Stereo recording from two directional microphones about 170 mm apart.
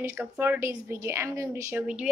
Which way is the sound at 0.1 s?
10° right (ahead or behind).